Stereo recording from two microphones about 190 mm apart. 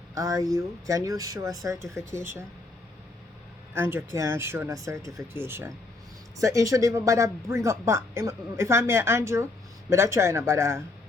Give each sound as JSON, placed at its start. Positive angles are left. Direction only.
{"t": 0.1, "sound": "speech", "side_deg": -15}
{"t": 3.8, "sound": "speech", "side_deg": -10}